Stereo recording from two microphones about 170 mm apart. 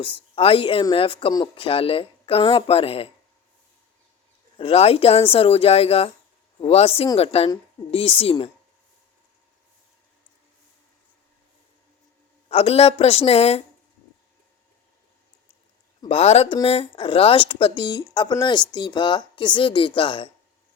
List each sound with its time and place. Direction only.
0.3 s speech: 35° left (ahead or behind)
4.5 s speech: 35° left (ahead or behind)
12.5 s speech: 35° left (ahead or behind)
16.0 s speech: 40° left (ahead or behind)